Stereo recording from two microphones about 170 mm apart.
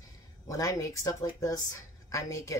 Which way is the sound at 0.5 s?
20° left (ahead or behind).